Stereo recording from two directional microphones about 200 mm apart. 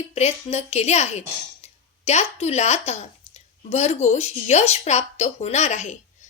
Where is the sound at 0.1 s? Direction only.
30° left (ahead or behind).